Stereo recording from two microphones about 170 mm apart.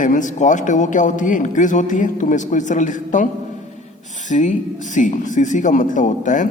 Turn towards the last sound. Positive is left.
turn(degrees=50)  # may be behind; listen again after turning